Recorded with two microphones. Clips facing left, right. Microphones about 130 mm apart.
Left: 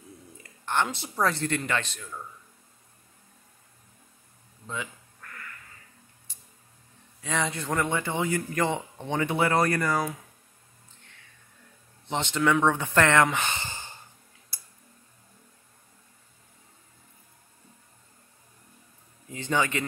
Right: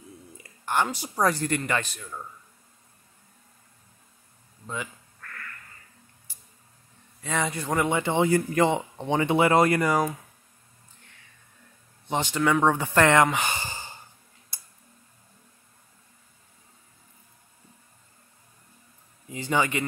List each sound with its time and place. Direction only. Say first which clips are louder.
0.4 s speech: right 2 dB; 5° right (ahead or behind)
5.2 s quack: right 2 dB; 15° left (ahead or behind)
6.3 s a sound: even; 5° right (ahead or behind)
7.2 s speech: right 1 dB; centre (ahead or behind); by 8.6 s 30° right (ahead or behind)
8.6 s speech: right 4 dB; 20° right (ahead or behind)
12.1 s speech: right 1 dB; 10° right (ahead or behind)
19.2 s a man's voice: right 2 dB; 10° right (ahead or behind)